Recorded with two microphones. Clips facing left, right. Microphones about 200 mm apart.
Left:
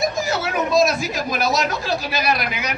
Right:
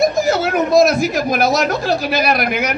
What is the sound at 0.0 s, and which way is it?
Speech, 55° right (ahead or behind).